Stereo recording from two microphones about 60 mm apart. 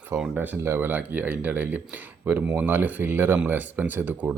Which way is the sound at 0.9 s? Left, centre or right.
Right.